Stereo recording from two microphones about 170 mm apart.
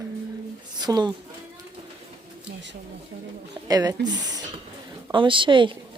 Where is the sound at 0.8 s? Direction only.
25° right (ahead or behind).